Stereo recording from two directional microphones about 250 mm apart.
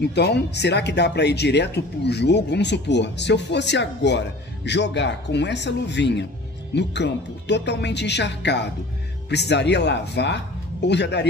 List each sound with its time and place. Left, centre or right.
0.0 s speech: left